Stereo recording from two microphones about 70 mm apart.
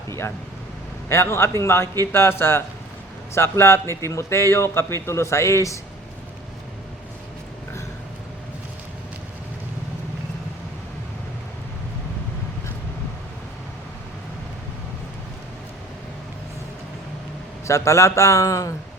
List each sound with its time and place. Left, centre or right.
0.1 s a man's voice: left
17.7 s a man's voice: left